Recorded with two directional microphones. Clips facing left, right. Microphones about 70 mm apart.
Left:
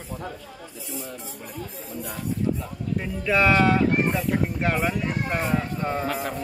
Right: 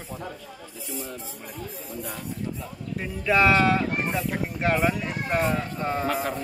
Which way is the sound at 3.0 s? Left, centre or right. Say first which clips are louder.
Right 1 dB; centre.